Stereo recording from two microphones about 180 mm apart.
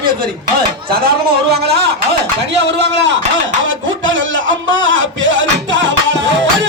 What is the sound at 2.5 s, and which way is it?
Speech, 75° right (ahead or behind).